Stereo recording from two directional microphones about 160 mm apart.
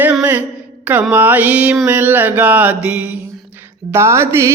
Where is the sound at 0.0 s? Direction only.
10° right (ahead or behind).